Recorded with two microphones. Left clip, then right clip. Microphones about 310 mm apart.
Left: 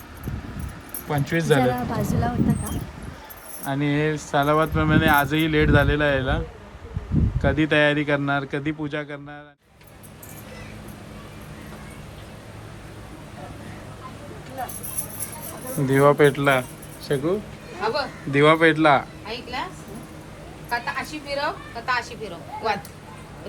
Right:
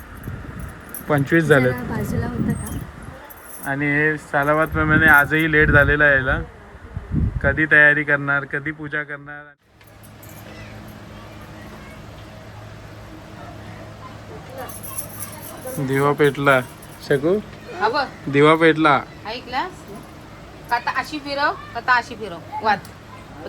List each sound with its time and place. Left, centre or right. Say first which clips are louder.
1.0 s speech: right 6 dB; centre
3.6 s speech: right 5 dB; centre
7.4 s speech: right 6 dB; centre
15.9 s speech: left 1 dB; centre
17.7 s a sound: right 5 dB; right
18.3 s a man's voice: right 2 dB; centre
19.2 s a woman's voice: right 5 dB; right
20.7 s a woman's voice: right 5 dB; right